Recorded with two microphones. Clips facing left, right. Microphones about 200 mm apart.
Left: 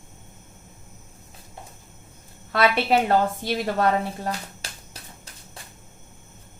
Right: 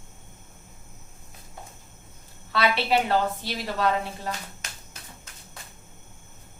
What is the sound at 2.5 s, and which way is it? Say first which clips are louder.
A woman's voice: left 3 dB; 50° left (ahead or behind).